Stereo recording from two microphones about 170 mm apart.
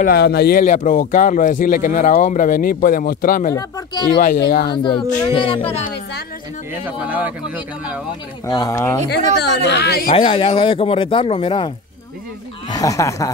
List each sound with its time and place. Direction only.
0.0 s speech: 70° left (ahead or behind)
3.5 s speech: 25° left (ahead or behind)
4.2 s speech: 55° left (ahead or behind)
4.8 s speech: 30° left (ahead or behind)
7.1 s speech: 10° right (ahead or behind)
8.5 s speech: 20° left (ahead or behind)
9.4 s a woman's voice: 75° left (ahead or behind)
10.1 s speech: 30° left (ahead or behind)